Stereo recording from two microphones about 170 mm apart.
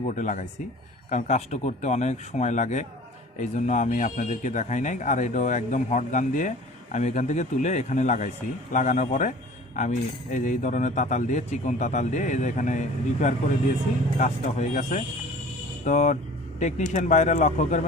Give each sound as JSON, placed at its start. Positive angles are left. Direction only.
{"t": 0.0, "sound": "speech", "side_deg": 45}